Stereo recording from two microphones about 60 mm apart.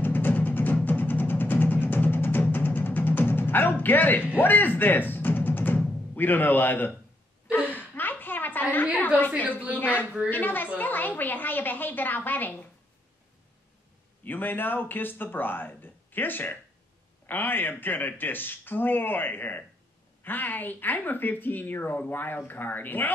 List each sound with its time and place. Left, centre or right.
0.0 s music: left
3.8 s speech: left
4.4 s music: left
7.5 s a sound: left
9.8 s speech: left
10.0 s a woman's voice: centre
10.3 s speech: left
14.2 s speech: left